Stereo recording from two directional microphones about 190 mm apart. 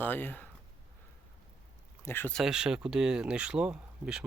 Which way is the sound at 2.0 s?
10° left (ahead or behind).